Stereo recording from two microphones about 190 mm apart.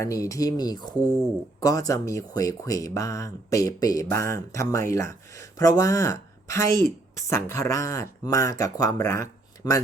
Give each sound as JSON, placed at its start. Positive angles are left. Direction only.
{"t": 0.0, "sound": "speech", "side_deg": 15}
{"t": 0.9, "sound": "speech", "side_deg": -15}
{"t": 1.6, "sound": "speech", "side_deg": 20}